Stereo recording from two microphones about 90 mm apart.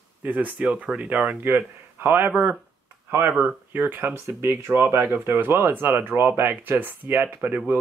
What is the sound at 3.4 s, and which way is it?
Speech, 20° right (ahead or behind).